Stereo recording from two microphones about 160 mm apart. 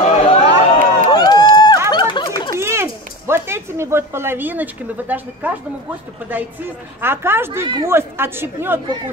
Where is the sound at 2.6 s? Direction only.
15° right (ahead or behind).